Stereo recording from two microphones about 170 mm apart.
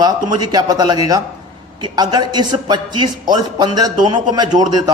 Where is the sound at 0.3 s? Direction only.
25° right (ahead or behind).